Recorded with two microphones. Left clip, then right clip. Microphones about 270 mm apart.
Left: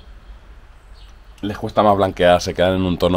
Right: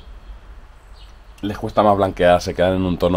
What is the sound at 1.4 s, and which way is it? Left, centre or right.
Speech, centre.